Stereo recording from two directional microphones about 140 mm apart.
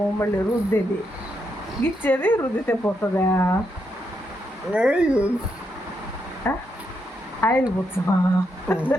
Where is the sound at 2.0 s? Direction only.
15° left (ahead or behind).